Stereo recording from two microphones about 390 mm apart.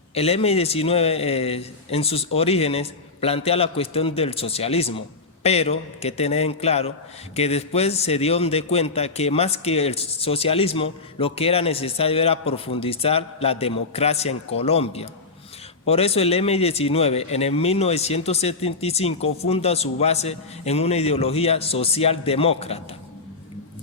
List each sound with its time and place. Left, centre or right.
0.1 s a man's voice: centre